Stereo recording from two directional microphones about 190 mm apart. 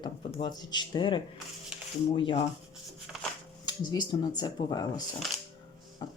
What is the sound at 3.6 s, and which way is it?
Speech, 20° left (ahead or behind).